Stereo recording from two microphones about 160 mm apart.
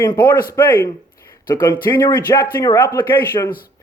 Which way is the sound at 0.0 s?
25° left (ahead or behind).